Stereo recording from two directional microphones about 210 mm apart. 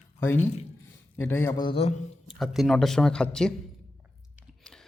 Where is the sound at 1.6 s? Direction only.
25° left (ahead or behind).